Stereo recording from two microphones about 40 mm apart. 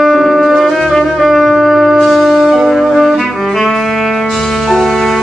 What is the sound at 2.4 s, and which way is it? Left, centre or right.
Music, centre.